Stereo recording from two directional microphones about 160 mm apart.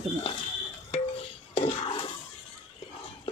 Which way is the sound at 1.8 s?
30° left (ahead or behind).